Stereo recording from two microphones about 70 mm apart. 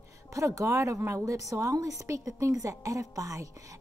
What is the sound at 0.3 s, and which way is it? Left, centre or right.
A woman's voice, right.